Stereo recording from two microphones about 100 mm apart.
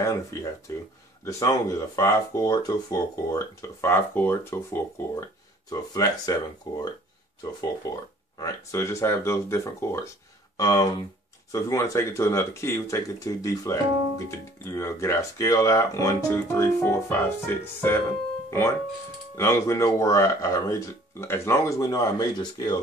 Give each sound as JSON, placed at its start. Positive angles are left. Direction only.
{"t": 0.0, "sound": "speech", "side_deg": 30}
{"t": 5.7, "sound": "speech", "side_deg": 40}
{"t": 7.9, "sound": "speech", "side_deg": 40}
{"t": 8.7, "sound": "speech", "side_deg": 30}
{"t": 10.6, "sound": "speech", "side_deg": 40}
{"t": 19.3, "sound": "speech", "side_deg": 30}